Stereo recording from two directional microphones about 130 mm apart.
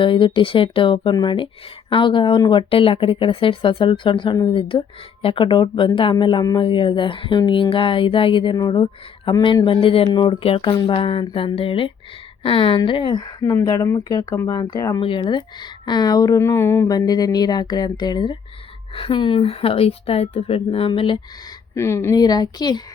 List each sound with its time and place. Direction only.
0.0 s speech: 40° left (ahead or behind)
13.4 s speech: 20° left (ahead or behind)
15.0 s speech: 40° left (ahead or behind)
21.8 s speech: 20° left (ahead or behind)